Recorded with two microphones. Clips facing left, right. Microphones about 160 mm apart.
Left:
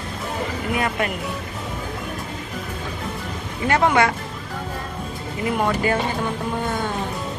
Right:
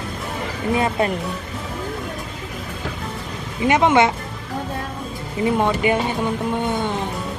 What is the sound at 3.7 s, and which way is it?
Speech, 20° right (ahead or behind).